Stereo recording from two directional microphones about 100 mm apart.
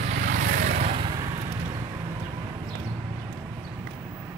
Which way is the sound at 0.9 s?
65° right (ahead or behind).